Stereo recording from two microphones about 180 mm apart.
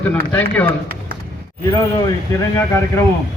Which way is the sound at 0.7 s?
55° right (ahead or behind).